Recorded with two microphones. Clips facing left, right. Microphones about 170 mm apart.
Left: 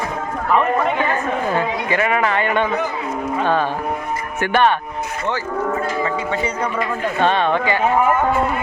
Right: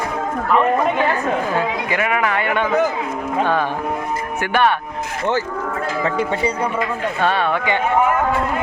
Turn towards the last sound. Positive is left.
turn(degrees=-10)  # may be behind; listen again after turning